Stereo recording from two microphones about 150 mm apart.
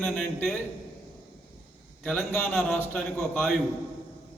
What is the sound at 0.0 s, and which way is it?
Speech, 5° left (ahead or behind).